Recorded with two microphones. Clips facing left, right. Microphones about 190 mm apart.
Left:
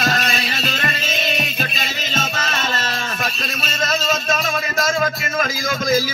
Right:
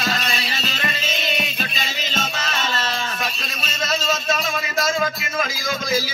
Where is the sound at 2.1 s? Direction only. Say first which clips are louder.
Left 3 dB; 50° left (ahead or behind).